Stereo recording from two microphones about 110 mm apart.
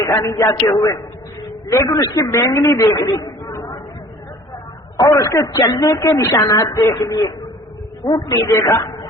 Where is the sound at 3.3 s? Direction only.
25° left (ahead or behind).